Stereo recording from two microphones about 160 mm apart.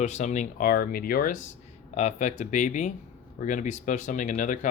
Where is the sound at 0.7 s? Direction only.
65° left (ahead or behind).